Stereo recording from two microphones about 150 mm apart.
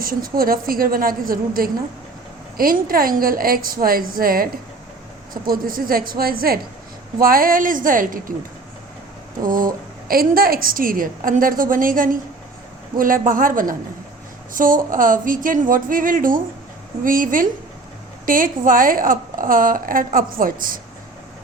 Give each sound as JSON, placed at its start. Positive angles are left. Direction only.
{"t": 0.0, "sound": "a woman's voice", "side_deg": -75}
{"t": 9.4, "sound": "a woman's voice", "side_deg": -70}